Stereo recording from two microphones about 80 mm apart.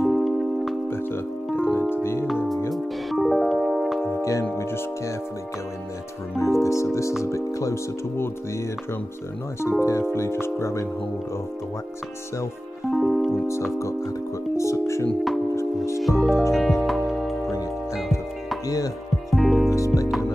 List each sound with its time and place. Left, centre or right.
0.1 s music: centre
0.8 s music: left
2.7 s music: centre
4.1 s music: left
6.3 s speech: left
9.8 s speech: left
12.9 s music: centre
13.7 s speech: left
15.5 s music: left
16.0 s music: centre
19.3 s music: centre
19.7 s music: left